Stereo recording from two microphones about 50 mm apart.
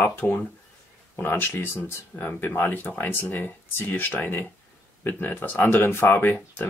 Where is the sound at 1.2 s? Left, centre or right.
Left.